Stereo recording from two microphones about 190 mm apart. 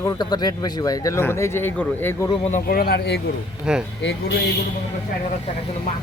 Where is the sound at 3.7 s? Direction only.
5° right (ahead or behind).